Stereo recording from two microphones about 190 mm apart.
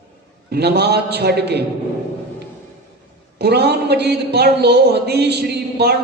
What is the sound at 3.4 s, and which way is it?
Speech, 60° right (ahead or behind).